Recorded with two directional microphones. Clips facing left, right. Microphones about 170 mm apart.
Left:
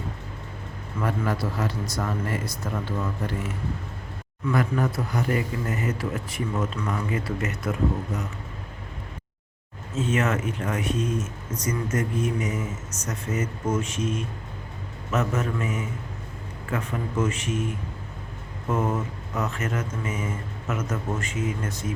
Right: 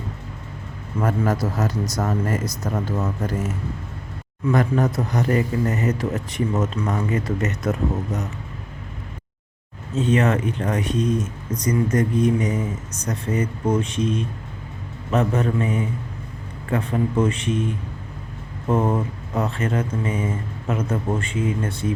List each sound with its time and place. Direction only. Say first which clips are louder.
1.0 s a man's voice: right 5 dB; 40° right (ahead or behind)
4.5 s a man's voice: right 4 dB; 40° right (ahead or behind)
9.9 s a man's voice: right 5 dB; 35° right (ahead or behind)
18.7 s a man's voice: right 5 dB; 35° right (ahead or behind)